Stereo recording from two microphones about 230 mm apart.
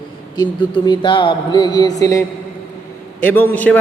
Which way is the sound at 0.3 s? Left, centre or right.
Centre.